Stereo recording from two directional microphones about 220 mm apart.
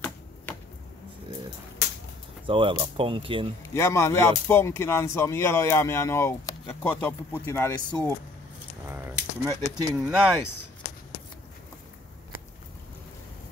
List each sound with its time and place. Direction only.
2.4 s speech: 25° right (ahead or behind)
3.7 s speech: 10° left (ahead or behind)
8.8 s speech: 10° right (ahead or behind)